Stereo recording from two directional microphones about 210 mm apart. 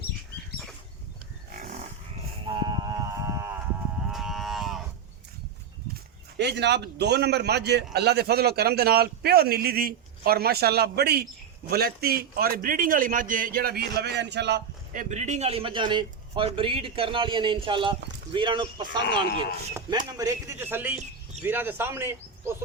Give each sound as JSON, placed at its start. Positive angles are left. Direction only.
{"t": 2.4, "sound": "a sound", "side_deg": -25}
{"t": 4.1, "sound": "cattle", "side_deg": 0}
{"t": 6.3, "sound": "a man's voice", "side_deg": -55}
{"t": 14.9, "sound": "a man's voice", "side_deg": -35}